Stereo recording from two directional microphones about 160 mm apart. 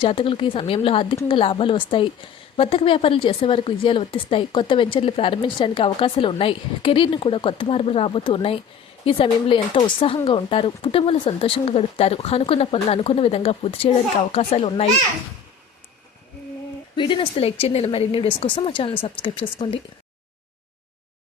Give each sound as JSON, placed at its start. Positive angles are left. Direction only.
{"t": 0.0, "sound": "speech", "side_deg": 35}
{"t": 16.9, "sound": "speech", "side_deg": 30}